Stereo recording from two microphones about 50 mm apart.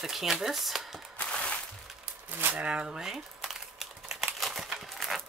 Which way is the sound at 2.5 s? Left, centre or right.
Right.